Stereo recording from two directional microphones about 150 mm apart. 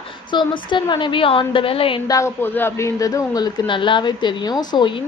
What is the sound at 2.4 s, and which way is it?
Speech, 15° left (ahead or behind).